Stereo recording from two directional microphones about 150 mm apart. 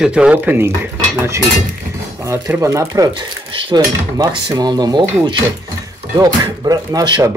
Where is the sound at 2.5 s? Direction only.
20° right (ahead or behind).